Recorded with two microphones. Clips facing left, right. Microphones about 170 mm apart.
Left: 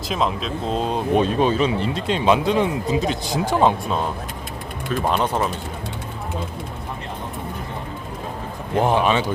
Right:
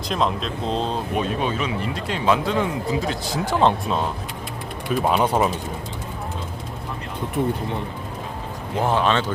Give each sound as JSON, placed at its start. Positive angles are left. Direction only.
{"t": 0.1, "sound": "speech", "side_deg": 0}
{"t": 1.1, "sound": "speech", "side_deg": 30}
{"t": 4.9, "sound": "speech", "side_deg": -10}
{"t": 8.8, "sound": "speech", "side_deg": 15}